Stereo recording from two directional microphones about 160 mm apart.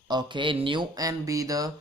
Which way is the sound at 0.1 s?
30° right (ahead or behind).